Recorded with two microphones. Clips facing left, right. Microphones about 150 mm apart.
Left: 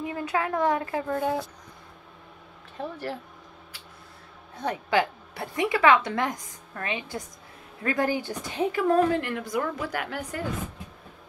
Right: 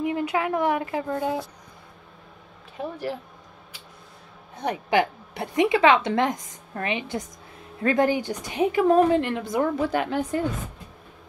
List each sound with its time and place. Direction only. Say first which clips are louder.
0.0 s a woman's voice: right 4 dB; 15° right (ahead or behind)
2.8 s speech: right 2 dB; 10° right (ahead or behind)
4.6 s a woman's voice: right 2 dB; 15° right (ahead or behind)